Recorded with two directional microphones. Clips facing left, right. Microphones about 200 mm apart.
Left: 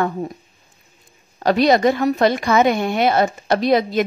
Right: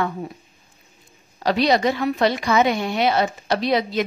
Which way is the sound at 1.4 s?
50° left (ahead or behind).